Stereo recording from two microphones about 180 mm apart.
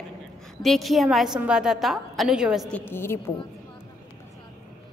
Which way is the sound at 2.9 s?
15° left (ahead or behind).